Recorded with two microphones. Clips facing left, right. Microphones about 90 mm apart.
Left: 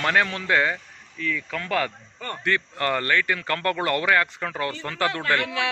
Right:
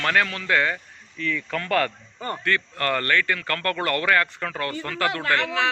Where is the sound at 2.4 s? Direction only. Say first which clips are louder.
Left 1 dB; 20° left (ahead or behind).